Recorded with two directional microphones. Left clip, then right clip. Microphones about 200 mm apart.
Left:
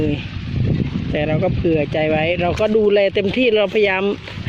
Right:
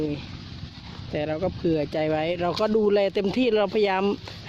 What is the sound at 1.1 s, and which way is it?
Speech, 10° right (ahead or behind).